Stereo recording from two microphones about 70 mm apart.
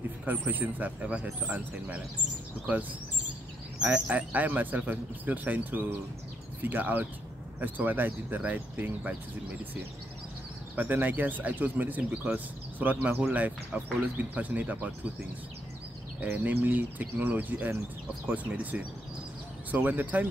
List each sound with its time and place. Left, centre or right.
0.2 s speech: right
3.8 s speech: right
10.8 s speech: right
12.0 s speech: centre
12.7 s speech: right
16.2 s speech: right